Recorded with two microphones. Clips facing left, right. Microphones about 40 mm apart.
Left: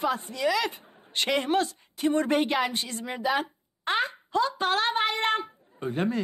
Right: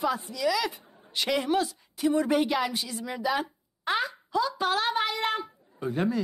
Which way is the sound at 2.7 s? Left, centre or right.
Left.